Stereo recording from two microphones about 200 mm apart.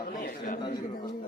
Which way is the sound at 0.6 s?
20° left (ahead or behind).